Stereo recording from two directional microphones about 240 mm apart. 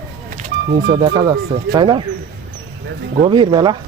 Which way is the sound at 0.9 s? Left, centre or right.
Centre.